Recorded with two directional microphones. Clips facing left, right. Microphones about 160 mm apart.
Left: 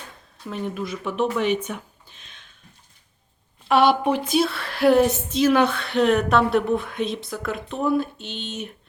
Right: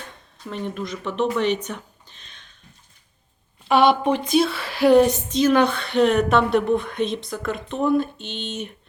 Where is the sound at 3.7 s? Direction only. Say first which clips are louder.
Right 1 dB; centre (ahead or behind).